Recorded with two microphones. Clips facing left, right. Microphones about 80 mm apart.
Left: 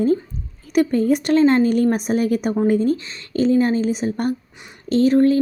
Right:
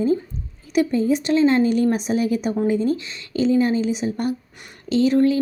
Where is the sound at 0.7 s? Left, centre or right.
Left.